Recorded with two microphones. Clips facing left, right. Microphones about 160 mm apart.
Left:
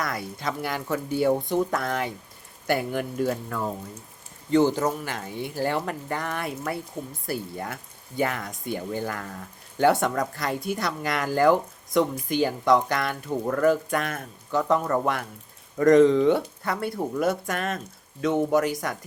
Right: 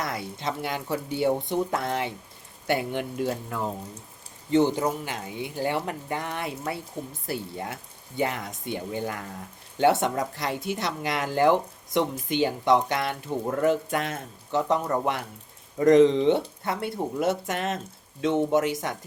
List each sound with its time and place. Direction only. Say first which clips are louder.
0.0 s a man's voice: left 1 dB; 25° right (ahead or behind)